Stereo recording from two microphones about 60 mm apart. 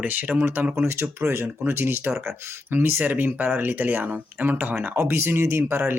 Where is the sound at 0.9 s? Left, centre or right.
Right.